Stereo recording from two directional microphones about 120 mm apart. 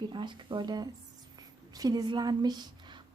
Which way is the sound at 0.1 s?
40° right (ahead or behind).